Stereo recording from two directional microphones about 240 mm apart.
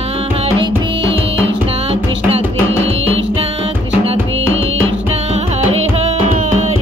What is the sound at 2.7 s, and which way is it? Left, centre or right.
Music, right.